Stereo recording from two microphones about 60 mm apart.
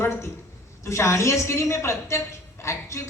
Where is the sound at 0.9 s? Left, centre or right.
Left.